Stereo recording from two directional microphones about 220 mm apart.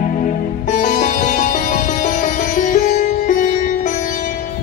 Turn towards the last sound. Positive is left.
turn(degrees=35)  # may be behind; listen again after turning